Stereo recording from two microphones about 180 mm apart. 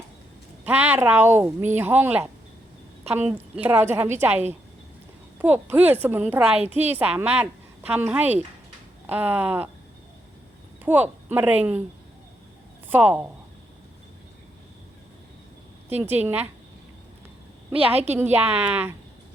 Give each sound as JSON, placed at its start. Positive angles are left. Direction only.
{"t": 0.6, "sound": "speech", "side_deg": -10}
{"t": 5.4, "sound": "speech", "side_deg": -10}
{"t": 10.8, "sound": "speech", "side_deg": -10}
{"t": 12.9, "sound": "speech", "side_deg": -10}
{"t": 15.9, "sound": "speech", "side_deg": -10}
{"t": 17.7, "sound": "a woman's voice", "side_deg": -35}
{"t": 18.1, "sound": "speech", "side_deg": -10}
{"t": 18.3, "sound": "a woman's voice", "side_deg": -35}
{"t": 18.6, "sound": "speech", "side_deg": -10}